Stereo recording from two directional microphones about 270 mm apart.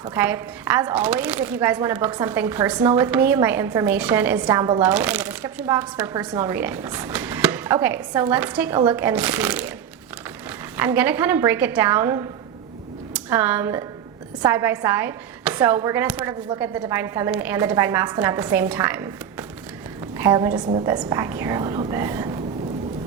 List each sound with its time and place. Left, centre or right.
0.1 s speech: centre
10.8 s a woman's voice: centre
20.6 s a woman's voice: right
20.8 s speech: centre